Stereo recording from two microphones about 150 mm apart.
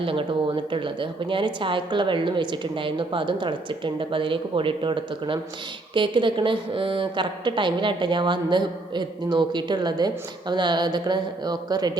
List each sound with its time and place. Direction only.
0.0 s speech: 35° right (ahead or behind)